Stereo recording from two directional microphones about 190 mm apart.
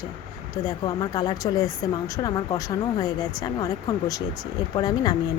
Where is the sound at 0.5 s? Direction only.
25° left (ahead or behind).